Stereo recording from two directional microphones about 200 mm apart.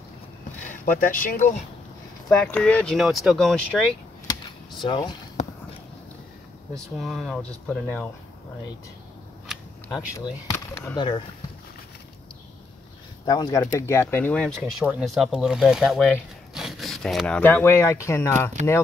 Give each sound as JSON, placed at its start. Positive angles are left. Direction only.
{"t": 0.7, "sound": "speech", "side_deg": 40}
{"t": 2.2, "sound": "speech", "side_deg": 5}
{"t": 4.8, "sound": "speech", "side_deg": 20}
{"t": 5.4, "sound": "basketball bounce", "side_deg": 35}
{"t": 6.7, "sound": "speech", "side_deg": 0}
{"t": 9.5, "sound": "camera", "side_deg": 0}
{"t": 10.5, "sound": "speech", "side_deg": 15}
{"t": 13.2, "sound": "speech", "side_deg": 20}